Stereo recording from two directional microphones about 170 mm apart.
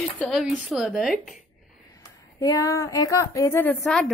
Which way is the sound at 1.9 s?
20° left (ahead or behind).